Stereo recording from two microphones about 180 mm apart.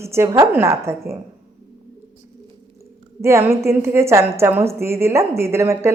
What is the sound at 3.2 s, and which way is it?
A woman's voice, 15° right (ahead or behind).